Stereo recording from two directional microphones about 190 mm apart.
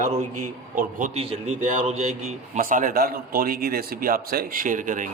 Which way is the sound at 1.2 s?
30° right (ahead or behind).